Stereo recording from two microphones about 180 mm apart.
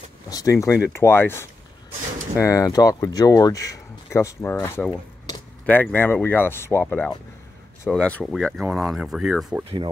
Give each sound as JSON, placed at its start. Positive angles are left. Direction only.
{"t": 0.3, "sound": "speech", "side_deg": 20}